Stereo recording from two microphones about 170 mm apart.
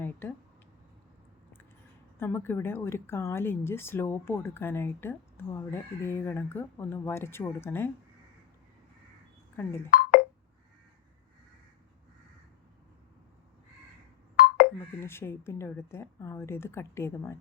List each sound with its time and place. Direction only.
0.0 s speech: 10° left (ahead or behind)
2.1 s speech: 15° left (ahead or behind)
9.9 s telephone dialing: 60° left (ahead or behind)
14.4 s a sound: 65° left (ahead or behind)
14.8 s speech: 15° left (ahead or behind)